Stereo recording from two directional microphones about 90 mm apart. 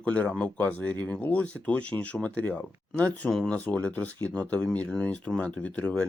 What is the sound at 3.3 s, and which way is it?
Speech, 5° left (ahead or behind).